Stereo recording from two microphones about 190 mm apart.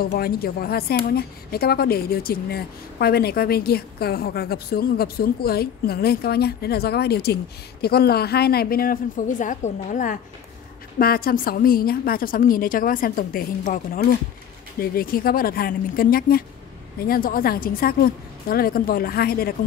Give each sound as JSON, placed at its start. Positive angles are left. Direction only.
{"t": 0.0, "sound": "a woman's voice", "side_deg": 50}